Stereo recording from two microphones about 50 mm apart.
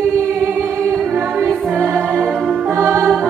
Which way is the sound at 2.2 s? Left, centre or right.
Centre.